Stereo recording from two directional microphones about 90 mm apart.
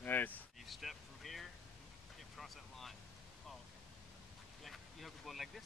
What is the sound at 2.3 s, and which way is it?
Vehicle, centre (ahead or behind).